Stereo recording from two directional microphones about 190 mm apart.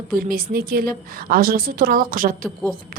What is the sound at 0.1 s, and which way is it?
A woman's voice, 50° right (ahead or behind).